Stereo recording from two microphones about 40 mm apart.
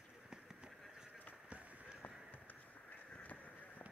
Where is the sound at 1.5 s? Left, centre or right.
Right.